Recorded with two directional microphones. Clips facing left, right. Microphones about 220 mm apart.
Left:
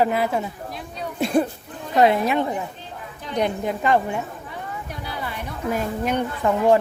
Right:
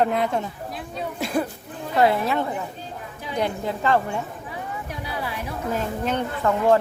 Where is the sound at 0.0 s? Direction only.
5° left (ahead or behind).